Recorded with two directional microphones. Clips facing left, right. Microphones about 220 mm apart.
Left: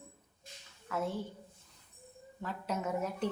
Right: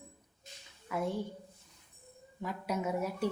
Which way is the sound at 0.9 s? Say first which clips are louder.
Right 1 dB; 15° right (ahead or behind).